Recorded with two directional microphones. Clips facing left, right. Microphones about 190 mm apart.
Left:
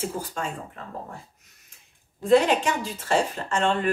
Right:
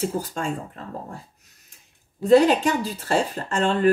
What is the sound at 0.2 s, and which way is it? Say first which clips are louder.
Speech: right 2 dB; 40° right (ahead or behind).